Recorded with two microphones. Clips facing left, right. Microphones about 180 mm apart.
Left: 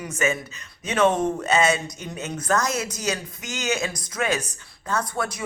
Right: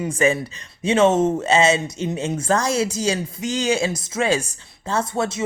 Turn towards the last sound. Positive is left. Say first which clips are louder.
# right 4 dB
turn(degrees=-25)  # may be behind; listen again after turning